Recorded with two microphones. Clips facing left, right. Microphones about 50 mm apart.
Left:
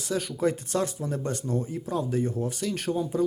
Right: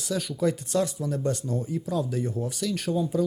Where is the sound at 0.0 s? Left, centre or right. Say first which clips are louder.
Even; left.